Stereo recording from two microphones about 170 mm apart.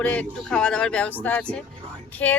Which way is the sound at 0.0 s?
10° left (ahead or behind).